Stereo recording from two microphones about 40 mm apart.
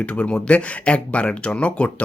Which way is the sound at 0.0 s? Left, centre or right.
Left.